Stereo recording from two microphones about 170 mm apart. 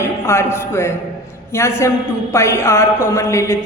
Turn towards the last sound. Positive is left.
turn(degrees=15)  # may be behind; listen again after turning